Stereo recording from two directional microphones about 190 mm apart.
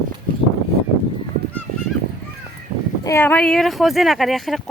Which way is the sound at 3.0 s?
10° left (ahead or behind).